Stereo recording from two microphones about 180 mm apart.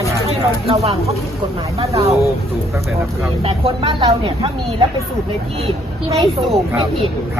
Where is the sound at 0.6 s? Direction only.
35° right (ahead or behind).